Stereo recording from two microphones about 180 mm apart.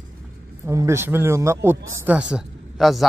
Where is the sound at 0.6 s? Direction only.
15° right (ahead or behind).